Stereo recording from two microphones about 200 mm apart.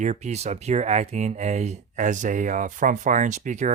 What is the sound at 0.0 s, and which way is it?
Speech, 35° right (ahead or behind).